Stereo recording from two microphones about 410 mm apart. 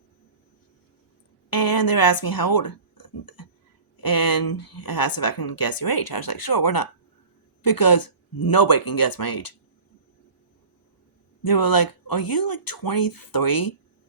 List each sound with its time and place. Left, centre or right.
1.5 s a sound: left
3.9 s speech: left
11.4 s speech: left